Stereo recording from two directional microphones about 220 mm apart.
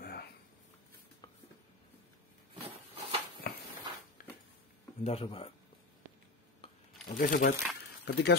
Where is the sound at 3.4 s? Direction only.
45° left (ahead or behind).